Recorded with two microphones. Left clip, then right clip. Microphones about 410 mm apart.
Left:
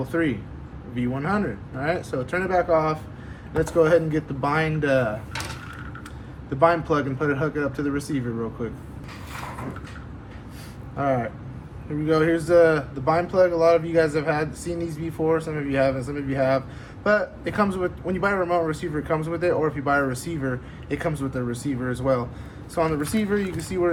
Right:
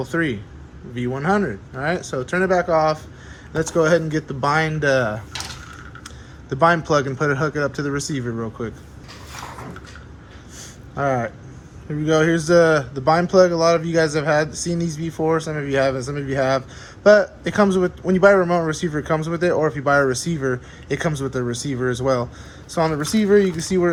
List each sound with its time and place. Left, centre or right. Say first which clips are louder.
0.0 s a man's voice: right 2 dB; centre
6.6 s a man's voice: right 3 dB; centre
10.9 s a man's voice: right 3 dB; centre